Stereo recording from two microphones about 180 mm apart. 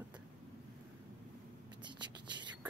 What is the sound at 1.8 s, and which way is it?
Writing, 25° right (ahead or behind).